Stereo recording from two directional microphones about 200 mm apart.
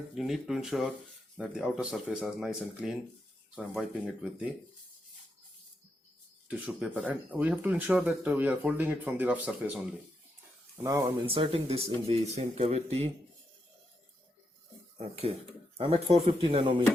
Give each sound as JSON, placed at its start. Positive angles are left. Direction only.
{"t": 0.1, "sound": "speech", "side_deg": 0}
{"t": 6.7, "sound": "speech", "side_deg": -5}
{"t": 10.8, "sound": "speech", "side_deg": -20}
{"t": 14.9, "sound": "speech", "side_deg": -30}